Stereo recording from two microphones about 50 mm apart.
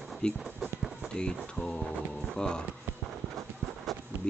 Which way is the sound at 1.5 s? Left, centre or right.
Centre.